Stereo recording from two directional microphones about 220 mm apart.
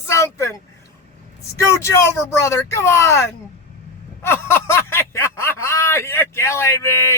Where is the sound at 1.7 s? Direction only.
15° left (ahead or behind).